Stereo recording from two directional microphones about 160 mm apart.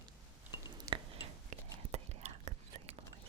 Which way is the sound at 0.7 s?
25° right (ahead or behind).